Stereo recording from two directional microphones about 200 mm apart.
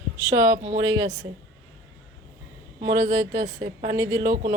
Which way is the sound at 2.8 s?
15° right (ahead or behind).